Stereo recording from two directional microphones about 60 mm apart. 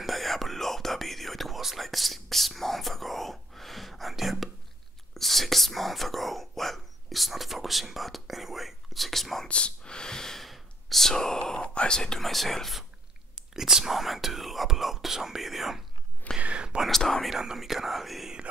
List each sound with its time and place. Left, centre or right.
0.0 s whispering: centre
9.5 s whispering: centre
16.3 s whispering: centre
16.8 s whispering: centre
17.3 s whispering: centre